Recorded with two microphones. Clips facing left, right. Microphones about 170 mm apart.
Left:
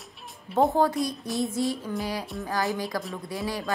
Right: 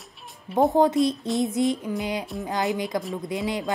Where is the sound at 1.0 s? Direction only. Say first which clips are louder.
Right 5 dB; 25° right (ahead or behind).